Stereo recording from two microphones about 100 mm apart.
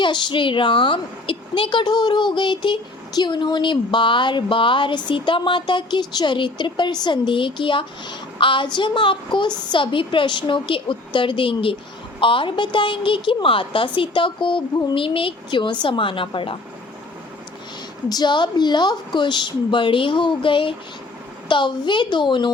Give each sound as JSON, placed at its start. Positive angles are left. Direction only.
{"t": 0.0, "sound": "a woman's voice", "side_deg": 50}
{"t": 18.1, "sound": "a woman's voice", "side_deg": 50}